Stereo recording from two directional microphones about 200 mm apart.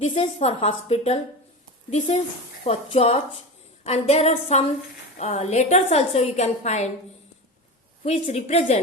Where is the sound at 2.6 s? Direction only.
30° left (ahead or behind).